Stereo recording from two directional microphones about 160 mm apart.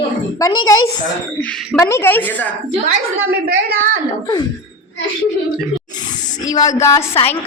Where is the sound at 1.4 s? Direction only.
10° left (ahead or behind).